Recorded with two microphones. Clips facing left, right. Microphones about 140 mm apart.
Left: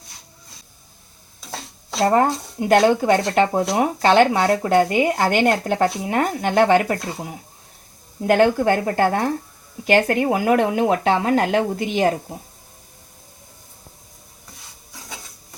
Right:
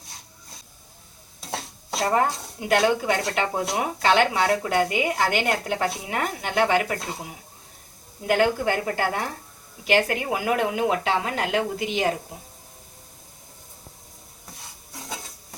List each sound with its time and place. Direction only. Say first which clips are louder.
2.0 s speech: left 5 dB; 45° left (ahead or behind)
8.3 s speech: left 5 dB; 45° left (ahead or behind)